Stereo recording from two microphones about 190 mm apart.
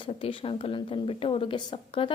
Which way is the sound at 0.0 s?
30° left (ahead or behind).